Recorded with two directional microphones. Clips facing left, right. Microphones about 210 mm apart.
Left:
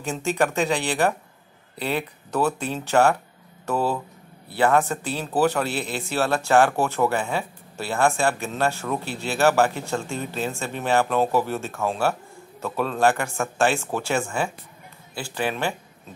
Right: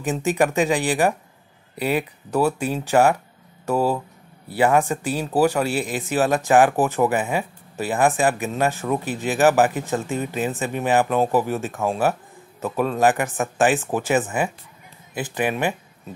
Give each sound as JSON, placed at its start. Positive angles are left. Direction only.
{"t": 0.0, "sound": "speech", "side_deg": -15}